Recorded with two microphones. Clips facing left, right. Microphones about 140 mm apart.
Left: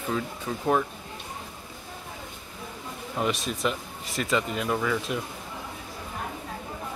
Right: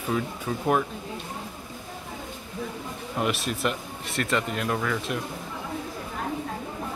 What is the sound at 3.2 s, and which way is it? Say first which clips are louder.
Speech: right 1 dB; 5° right (ahead or behind).